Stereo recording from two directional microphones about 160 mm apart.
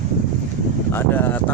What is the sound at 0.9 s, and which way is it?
Speech, 15° left (ahead or behind).